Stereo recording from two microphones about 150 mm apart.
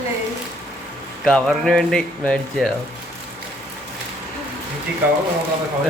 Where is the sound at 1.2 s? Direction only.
Centre (ahead or behind).